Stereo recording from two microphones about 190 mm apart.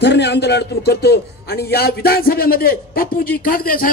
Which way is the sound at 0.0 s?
65° left (ahead or behind).